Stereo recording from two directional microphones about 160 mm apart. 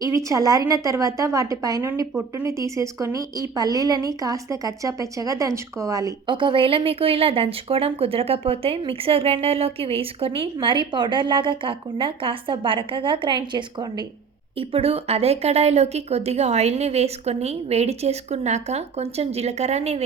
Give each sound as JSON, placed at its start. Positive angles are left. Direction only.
{"t": 0.0, "sound": "a woman's voice", "side_deg": -20}